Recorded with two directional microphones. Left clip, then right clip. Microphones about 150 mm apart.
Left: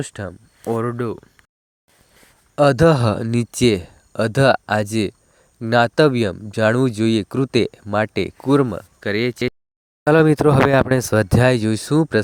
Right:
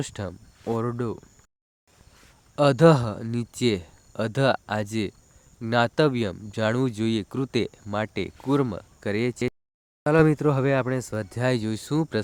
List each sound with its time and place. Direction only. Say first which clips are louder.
0.0 s speech: left 4 dB; 20° left (ahead or behind)
2.6 s speech: left 4 dB; 35° left (ahead or behind)
9.0 s speech: left 6 dB; 15° left (ahead or behind)
10.0 s speech: left 6 dB; 65° left (ahead or behind); by 12.2 s 40° left (ahead or behind)